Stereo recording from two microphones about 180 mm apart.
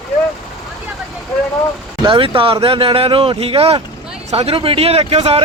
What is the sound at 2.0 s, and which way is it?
Speech, 30° right (ahead or behind).